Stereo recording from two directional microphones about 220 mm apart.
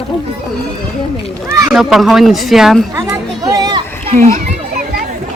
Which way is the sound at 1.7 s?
Centre (ahead or behind).